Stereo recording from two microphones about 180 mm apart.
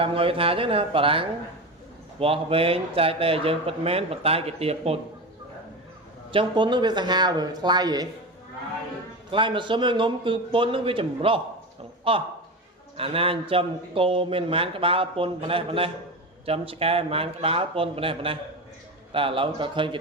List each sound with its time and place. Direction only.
0.0 s a man's voice: 30° right (ahead or behind)
6.3 s a man's voice: 25° right (ahead or behind)
9.3 s a man's voice: 25° right (ahead or behind)